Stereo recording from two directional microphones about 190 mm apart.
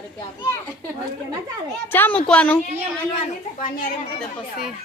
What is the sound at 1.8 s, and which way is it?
Speech, 10° left (ahead or behind).